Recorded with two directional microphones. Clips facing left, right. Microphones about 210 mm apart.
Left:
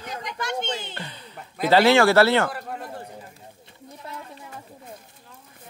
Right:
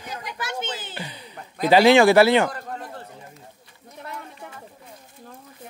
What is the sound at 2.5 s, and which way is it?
Speech, 10° left (ahead or behind).